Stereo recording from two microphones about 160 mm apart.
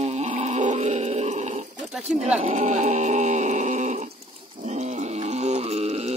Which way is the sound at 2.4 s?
45° right (ahead or behind).